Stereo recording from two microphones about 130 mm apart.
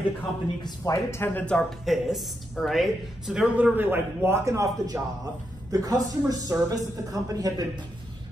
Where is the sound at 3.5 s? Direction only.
15° right (ahead or behind); by 7.8 s 30° right (ahead or behind).